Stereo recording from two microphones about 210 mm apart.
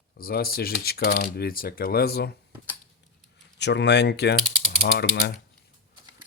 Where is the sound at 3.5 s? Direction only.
55° left (ahead or behind).